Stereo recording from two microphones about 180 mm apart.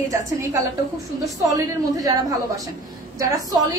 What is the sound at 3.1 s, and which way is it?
Speech, 20° right (ahead or behind).